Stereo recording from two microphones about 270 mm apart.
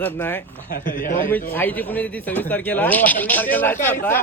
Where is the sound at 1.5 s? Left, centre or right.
Centre.